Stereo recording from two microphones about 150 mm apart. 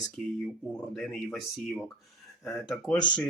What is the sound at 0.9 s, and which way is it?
Speech, centre (ahead or behind).